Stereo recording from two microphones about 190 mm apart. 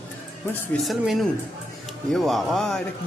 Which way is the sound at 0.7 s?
Centre (ahead or behind).